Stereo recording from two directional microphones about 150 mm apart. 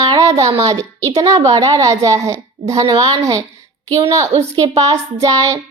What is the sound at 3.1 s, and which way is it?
A child's voice, 20° right (ahead or behind).